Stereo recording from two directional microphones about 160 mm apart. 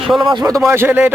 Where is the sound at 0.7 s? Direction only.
10° right (ahead or behind).